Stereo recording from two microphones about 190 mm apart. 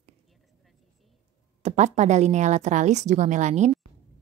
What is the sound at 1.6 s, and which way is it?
A woman's voice, 35° right (ahead or behind).